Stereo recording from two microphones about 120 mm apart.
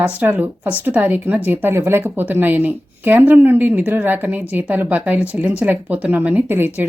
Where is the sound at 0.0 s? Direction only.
15° right (ahead or behind).